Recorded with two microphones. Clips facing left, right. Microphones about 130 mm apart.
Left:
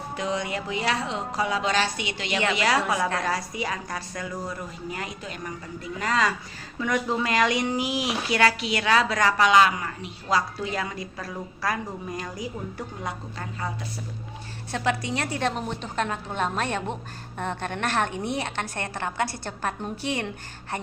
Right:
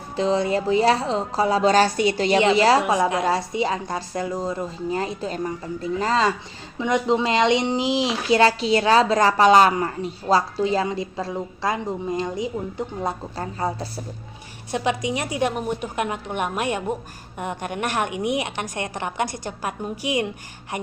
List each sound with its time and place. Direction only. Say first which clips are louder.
0.2 s a woman's voice: right 9 dB; 30° right (ahead or behind)
14.7 s a woman's voice: right 3 dB; 15° right (ahead or behind)